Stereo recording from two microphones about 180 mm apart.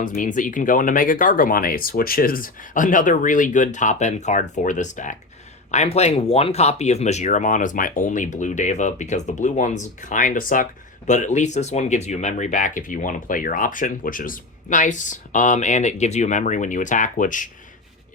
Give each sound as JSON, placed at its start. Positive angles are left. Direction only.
{"t": 0.0, "sound": "speech", "side_deg": 45}